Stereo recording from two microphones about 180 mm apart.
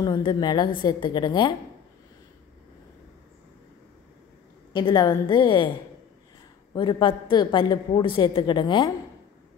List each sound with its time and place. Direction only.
0.0 s a woman's voice: 25° left (ahead or behind)
4.7 s a woman's voice: 25° left (ahead or behind)
6.7 s a woman's voice: 25° left (ahead or behind)